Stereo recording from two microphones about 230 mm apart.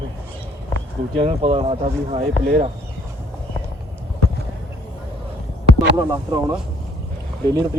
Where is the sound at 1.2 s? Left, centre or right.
Right.